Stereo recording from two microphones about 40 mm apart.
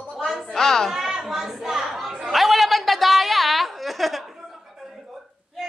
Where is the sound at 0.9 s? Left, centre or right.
Centre.